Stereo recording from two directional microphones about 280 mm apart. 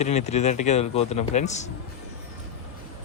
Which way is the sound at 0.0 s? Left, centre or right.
Left.